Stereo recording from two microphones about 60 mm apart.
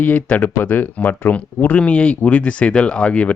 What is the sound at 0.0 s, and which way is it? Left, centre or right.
Speech, left.